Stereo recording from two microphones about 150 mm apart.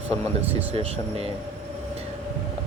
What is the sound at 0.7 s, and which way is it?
Speech, 40° right (ahead or behind).